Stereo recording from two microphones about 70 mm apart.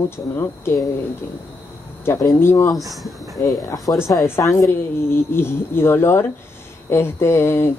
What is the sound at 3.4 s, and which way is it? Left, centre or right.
Speech, left.